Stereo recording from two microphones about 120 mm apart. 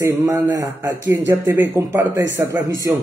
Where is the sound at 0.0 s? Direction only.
25° right (ahead or behind).